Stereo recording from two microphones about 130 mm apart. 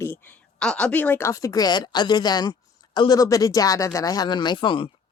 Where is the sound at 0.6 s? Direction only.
5° left (ahead or behind); by 4.8 s 40° left (ahead or behind).